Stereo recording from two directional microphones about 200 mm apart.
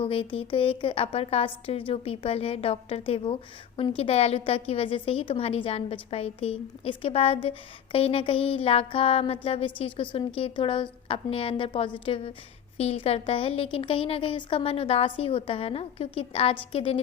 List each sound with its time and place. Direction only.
0.0 s a woman's voice: 25° left (ahead or behind)